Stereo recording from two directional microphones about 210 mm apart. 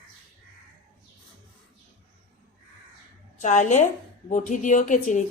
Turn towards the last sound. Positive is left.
turn(degrees=35)  # may be behind; listen again after turning